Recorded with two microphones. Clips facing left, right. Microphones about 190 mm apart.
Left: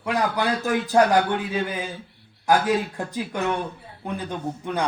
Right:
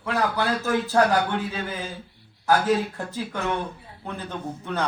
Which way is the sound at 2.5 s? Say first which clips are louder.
Left 1 dB; 15° left (ahead or behind).